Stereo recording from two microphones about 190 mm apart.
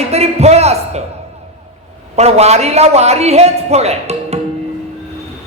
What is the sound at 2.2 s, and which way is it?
A woman's voice, 35° right (ahead or behind).